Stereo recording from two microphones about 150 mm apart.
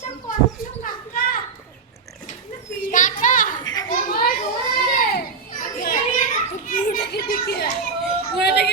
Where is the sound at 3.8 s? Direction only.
65° left (ahead or behind).